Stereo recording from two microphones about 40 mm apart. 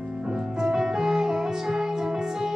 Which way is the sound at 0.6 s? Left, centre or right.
Centre.